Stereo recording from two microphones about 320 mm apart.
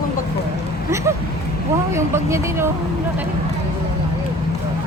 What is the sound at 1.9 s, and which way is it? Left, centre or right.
Speech, centre.